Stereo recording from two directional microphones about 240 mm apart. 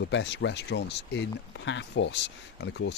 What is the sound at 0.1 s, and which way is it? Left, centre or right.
Speech, left.